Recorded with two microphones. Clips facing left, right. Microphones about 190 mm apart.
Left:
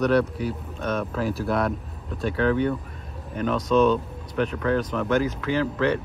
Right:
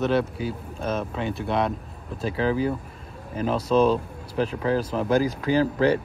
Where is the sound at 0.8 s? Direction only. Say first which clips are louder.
Left 1 dB; 30° right (ahead or behind).